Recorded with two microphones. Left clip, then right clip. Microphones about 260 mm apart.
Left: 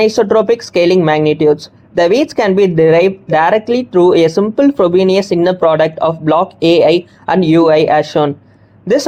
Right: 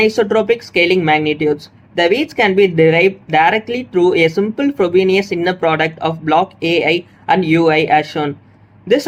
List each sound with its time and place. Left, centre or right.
0.0 s speech: left